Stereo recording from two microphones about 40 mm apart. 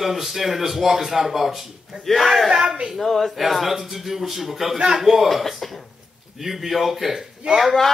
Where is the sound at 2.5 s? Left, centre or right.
Centre.